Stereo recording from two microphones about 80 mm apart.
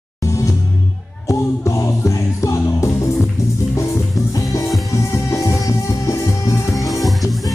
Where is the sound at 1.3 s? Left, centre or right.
Left.